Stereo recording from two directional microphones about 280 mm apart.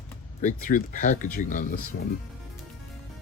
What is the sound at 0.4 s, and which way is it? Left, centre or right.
Speech, left.